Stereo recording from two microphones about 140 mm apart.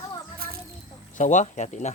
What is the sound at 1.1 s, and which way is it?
Speech, 65° left (ahead or behind).